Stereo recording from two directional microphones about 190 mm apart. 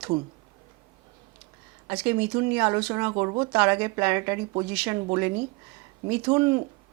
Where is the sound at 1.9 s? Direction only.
10° right (ahead or behind).